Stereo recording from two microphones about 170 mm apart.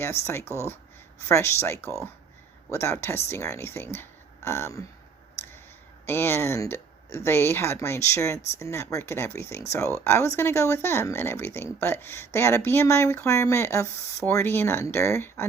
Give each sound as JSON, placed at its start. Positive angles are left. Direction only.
{"t": 0.3, "sound": "speech", "side_deg": 15}
{"t": 6.1, "sound": "speech", "side_deg": 15}